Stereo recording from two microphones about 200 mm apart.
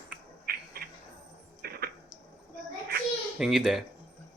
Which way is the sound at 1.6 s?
50° right (ahead or behind).